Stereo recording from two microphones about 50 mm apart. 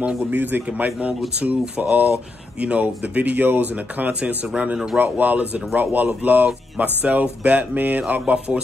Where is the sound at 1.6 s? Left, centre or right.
Centre.